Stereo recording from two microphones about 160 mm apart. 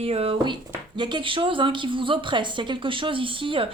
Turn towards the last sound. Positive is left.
turn(degrees=-35)  # may be behind; listen again after turning